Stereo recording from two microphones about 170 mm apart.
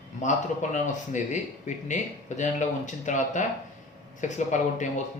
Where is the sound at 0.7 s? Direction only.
45° left (ahead or behind).